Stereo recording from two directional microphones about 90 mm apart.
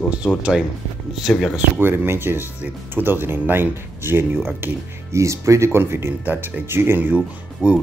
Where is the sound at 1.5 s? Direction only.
20° right (ahead or behind).